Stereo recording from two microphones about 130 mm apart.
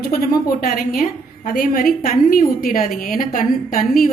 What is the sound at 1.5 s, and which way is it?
A woman's voice, 90° left.